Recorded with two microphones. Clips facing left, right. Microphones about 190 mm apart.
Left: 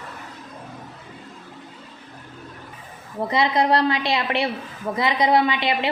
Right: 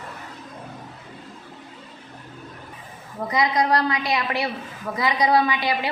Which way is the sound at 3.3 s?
30° left (ahead or behind).